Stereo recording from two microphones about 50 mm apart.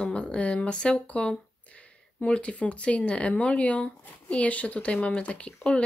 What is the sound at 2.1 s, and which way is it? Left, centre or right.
Speech, left.